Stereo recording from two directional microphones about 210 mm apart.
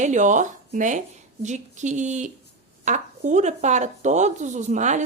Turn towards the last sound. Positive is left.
turn(degrees=-35)  # may be behind; listen again after turning